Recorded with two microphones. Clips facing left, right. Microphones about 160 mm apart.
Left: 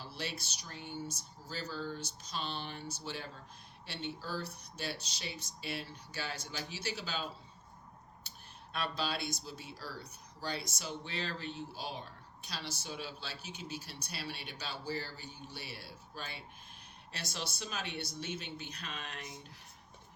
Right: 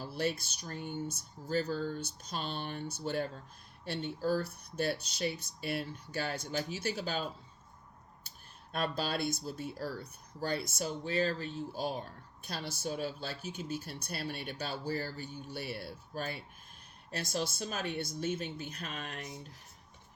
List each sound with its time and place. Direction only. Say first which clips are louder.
0.0 s speech: right 8 dB; 50° right (ahead or behind)
8.3 s a sound: left 2 dB; 50° right (ahead or behind)
8.7 s speech: right 3 dB; 50° right (ahead or behind)